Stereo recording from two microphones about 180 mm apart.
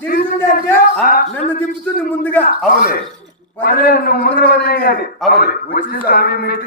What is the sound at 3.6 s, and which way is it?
A man's voice, 55° left (ahead or behind).